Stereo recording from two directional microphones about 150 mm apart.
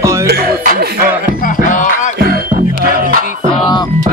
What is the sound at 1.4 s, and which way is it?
Music, 60° left (ahead or behind).